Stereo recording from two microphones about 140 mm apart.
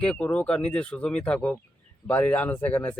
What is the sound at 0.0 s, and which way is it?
Speech, 10° left (ahead or behind).